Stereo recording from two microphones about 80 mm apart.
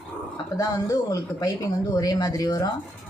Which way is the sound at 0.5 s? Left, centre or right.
Left.